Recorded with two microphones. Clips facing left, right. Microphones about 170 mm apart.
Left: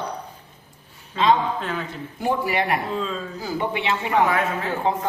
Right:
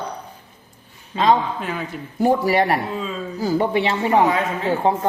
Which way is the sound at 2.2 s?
40° right (ahead or behind).